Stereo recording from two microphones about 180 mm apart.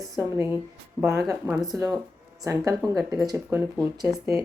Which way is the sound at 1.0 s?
15° right (ahead or behind).